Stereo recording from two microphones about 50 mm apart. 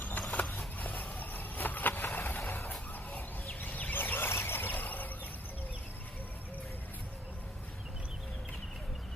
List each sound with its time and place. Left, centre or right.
0.4 s a sound: left
1.2 s vehicle: left
2.7 s fowl: left